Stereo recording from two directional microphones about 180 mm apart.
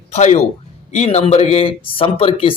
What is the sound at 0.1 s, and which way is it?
A man's voice, 40° left (ahead or behind).